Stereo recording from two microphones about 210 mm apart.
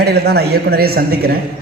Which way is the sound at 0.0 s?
50° right (ahead or behind).